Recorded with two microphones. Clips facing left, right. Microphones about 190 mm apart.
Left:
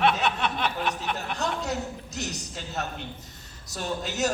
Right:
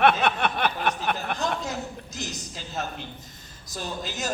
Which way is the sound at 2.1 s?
70° left (ahead or behind).